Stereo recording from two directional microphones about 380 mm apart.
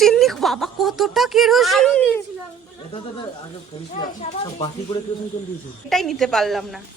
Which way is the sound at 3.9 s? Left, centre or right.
Centre.